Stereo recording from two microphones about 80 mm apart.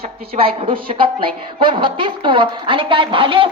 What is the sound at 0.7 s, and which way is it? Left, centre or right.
A woman's voice, right.